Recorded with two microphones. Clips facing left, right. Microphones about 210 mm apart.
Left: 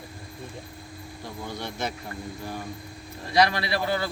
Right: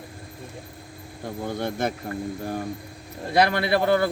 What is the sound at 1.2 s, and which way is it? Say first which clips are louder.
A man's voice: right 7 dB; 50° right (ahead or behind).